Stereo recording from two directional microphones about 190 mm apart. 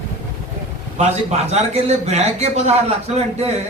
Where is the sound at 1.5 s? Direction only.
35° right (ahead or behind).